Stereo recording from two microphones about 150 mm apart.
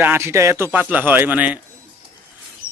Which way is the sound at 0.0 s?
15° right (ahead or behind).